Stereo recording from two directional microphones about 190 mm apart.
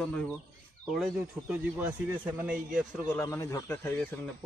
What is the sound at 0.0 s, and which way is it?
Speech, 5° left (ahead or behind).